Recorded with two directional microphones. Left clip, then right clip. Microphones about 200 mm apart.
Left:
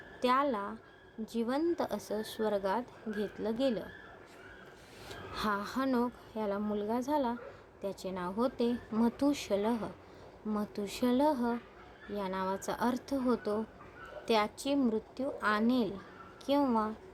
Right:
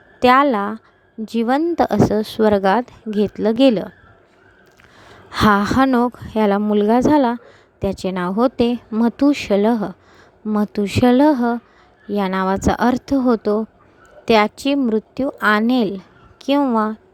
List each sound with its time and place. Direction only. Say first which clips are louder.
0.2 s speech: right 17 dB; 40° right (ahead or behind)
5.3 s a woman's voice: right 19 dB; 45° right (ahead or behind)